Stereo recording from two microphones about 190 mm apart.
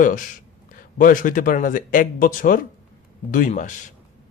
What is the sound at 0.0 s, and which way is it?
Speech, 45° left (ahead or behind).